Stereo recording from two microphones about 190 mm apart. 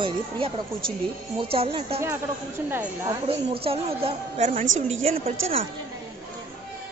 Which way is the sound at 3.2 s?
30° right (ahead or behind).